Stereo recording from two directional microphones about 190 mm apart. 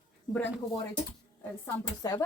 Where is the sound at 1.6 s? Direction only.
20° left (ahead or behind).